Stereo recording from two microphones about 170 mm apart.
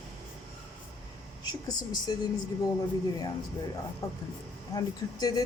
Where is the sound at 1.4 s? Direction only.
25° left (ahead or behind).